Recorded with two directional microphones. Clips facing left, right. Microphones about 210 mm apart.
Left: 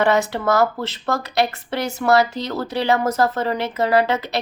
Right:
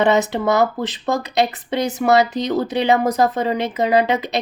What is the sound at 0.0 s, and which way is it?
Speech, 20° right (ahead or behind).